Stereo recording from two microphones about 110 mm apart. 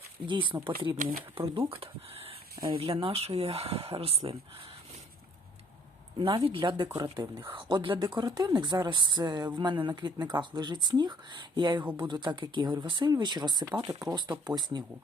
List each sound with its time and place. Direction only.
0.3 s speech: 50° right (ahead or behind)
1.5 s speech: 60° right (ahead or behind)
6.1 s speech: 50° right (ahead or behind)
8.1 s speech: 35° right (ahead or behind)